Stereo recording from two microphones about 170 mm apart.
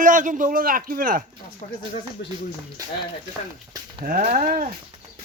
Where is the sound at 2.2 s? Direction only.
90° left.